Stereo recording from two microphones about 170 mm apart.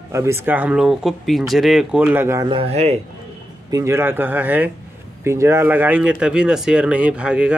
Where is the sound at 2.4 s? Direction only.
35° right (ahead or behind).